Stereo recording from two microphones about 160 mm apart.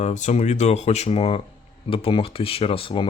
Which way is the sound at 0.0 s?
50° left (ahead or behind).